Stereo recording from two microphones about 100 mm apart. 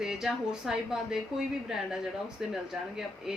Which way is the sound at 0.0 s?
5° right (ahead or behind).